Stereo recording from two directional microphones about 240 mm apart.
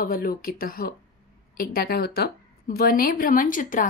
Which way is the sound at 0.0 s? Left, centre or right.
Left.